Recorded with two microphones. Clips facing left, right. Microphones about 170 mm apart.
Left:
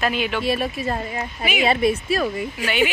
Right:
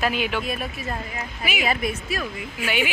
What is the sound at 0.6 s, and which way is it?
Speech, 30° left (ahead or behind).